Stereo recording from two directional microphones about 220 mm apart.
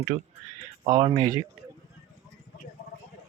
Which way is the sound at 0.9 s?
20° right (ahead or behind).